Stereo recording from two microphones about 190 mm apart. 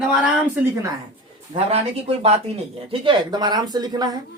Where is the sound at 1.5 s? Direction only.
35° right (ahead or behind).